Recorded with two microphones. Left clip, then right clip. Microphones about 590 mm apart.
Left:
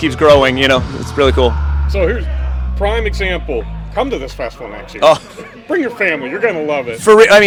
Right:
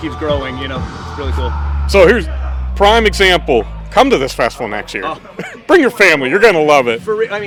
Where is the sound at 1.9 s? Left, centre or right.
Right.